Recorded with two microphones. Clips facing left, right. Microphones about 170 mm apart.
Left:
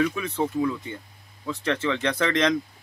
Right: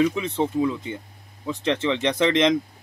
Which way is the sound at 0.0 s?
25° right (ahead or behind).